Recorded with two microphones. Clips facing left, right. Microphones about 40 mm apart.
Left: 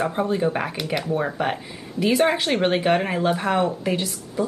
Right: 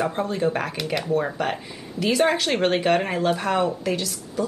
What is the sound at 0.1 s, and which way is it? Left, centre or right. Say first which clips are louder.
Speech: left 1 dB; centre.